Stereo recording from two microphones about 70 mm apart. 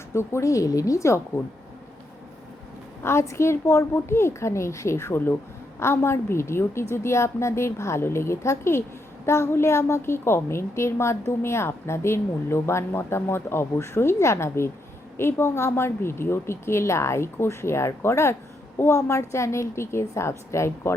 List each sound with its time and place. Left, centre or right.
0.1 s a woman's voice: left
3.0 s a woman's voice: left